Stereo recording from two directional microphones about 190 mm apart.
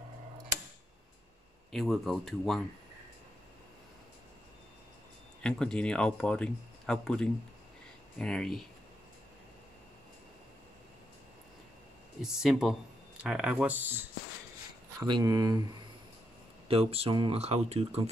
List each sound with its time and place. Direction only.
1.7 s speech: centre (ahead or behind)
5.4 s speech: 5° left (ahead or behind)
12.2 s speech: 5° right (ahead or behind)
15.0 s speech: 20° right (ahead or behind)
16.6 s speech: 30° right (ahead or behind)